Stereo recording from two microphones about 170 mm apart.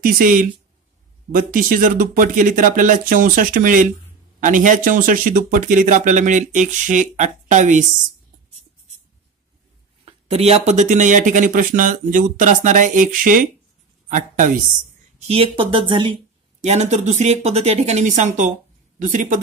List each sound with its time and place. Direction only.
0.0 s speech: 55° right (ahead or behind)
10.0 s speech: 40° right (ahead or behind)
15.1 s speech: 35° right (ahead or behind)
16.6 s speech: 40° right (ahead or behind)